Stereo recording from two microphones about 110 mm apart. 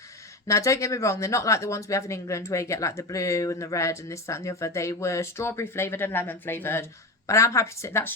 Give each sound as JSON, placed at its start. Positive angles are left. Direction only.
{"t": 0.4, "sound": "speech", "side_deg": 30}